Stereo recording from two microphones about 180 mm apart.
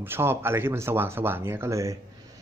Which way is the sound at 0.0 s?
10° right (ahead or behind).